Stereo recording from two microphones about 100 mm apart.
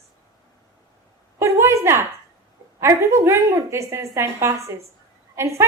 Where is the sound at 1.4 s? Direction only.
25° right (ahead or behind).